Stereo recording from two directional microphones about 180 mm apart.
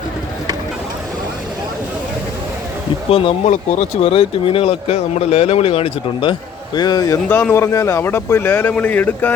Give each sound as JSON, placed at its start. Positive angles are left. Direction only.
{"t": 3.1, "sound": "a man's voice", "side_deg": 30}
{"t": 7.3, "sound": "speech", "side_deg": 10}